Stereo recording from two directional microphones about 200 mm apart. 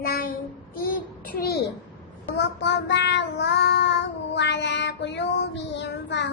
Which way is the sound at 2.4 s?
60° left (ahead or behind).